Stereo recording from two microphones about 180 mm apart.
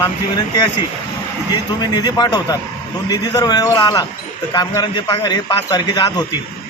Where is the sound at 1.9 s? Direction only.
25° left (ahead or behind).